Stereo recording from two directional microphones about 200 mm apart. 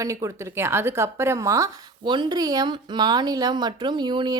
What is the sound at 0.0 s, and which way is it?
Speech, 15° right (ahead or behind).